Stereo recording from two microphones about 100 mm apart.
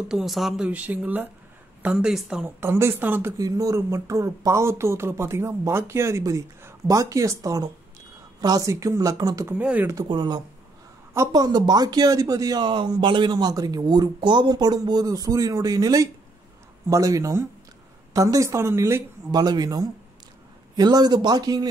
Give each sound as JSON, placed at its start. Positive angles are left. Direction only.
{"t": 0.1, "sound": "speech", "side_deg": 0}
{"t": 0.7, "sound": "a woman's voice", "side_deg": -15}
{"t": 2.4, "sound": "speech", "side_deg": -25}
{"t": 3.3, "sound": "speech", "side_deg": -35}
{"t": 9.6, "sound": "a woman's voice", "side_deg": -15}
{"t": 10.0, "sound": "speech", "side_deg": -45}
{"t": 12.6, "sound": "speech", "side_deg": -50}
{"t": 19.3, "sound": "speech", "side_deg": -45}